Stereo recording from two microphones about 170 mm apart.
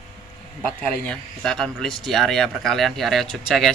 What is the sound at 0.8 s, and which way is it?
Speech, 5° left (ahead or behind).